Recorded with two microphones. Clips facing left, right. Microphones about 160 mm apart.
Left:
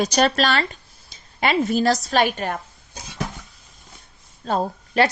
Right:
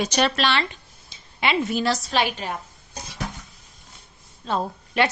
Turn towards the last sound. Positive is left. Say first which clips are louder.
# left 3 dB
turn(degrees=40)  # may be behind; listen again after turning